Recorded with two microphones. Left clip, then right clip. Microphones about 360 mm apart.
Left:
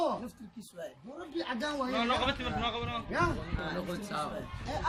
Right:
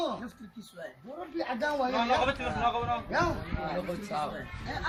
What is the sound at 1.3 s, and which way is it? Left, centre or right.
Speech, right.